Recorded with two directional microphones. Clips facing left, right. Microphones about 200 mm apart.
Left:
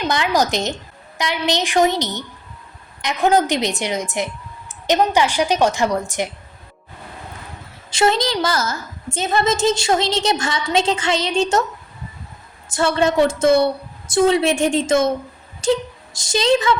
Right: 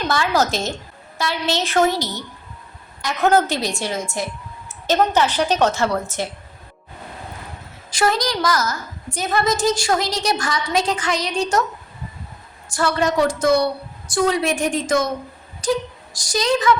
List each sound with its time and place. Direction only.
0.1 s a woman's voice: 15° left (ahead or behind)
7.9 s a woman's voice: 25° left (ahead or behind)
12.7 s a woman's voice: 25° left (ahead or behind)